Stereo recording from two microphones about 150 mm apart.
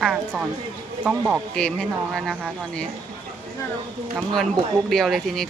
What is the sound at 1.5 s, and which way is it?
Speech, 5° left (ahead or behind).